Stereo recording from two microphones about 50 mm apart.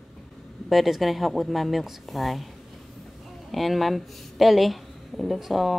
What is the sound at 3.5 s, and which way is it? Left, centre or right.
A woman's voice, centre.